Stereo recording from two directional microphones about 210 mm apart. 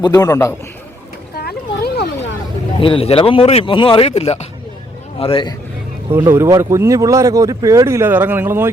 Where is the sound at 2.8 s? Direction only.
25° left (ahead or behind).